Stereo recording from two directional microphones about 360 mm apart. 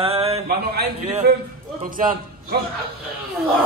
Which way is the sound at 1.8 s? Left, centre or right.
Right.